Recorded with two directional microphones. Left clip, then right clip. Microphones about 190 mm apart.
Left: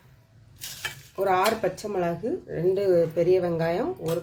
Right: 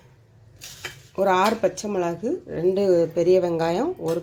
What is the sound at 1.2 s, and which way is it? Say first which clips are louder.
Speech: right 3 dB; 35° right (ahead or behind).